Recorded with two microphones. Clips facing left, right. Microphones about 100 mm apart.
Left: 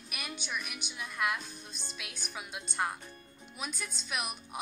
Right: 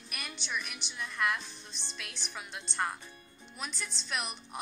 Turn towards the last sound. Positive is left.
turn(degrees=5)  # may be behind; listen again after turning